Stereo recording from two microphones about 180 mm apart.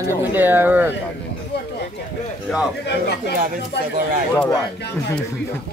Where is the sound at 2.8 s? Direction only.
70° left (ahead or behind).